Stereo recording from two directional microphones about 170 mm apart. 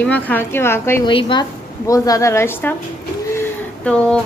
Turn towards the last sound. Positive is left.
turn(degrees=5)  # may be behind; listen again after turning